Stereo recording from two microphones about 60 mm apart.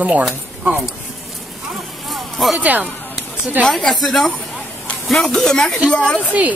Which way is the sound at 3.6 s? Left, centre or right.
Centre.